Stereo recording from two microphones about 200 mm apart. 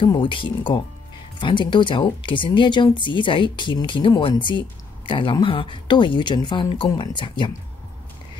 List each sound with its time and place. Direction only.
0.0 s speech: 25° left (ahead or behind)